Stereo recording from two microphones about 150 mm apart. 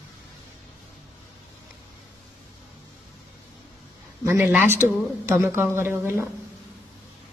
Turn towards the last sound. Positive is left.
turn(degrees=-15)  # may be behind; listen again after turning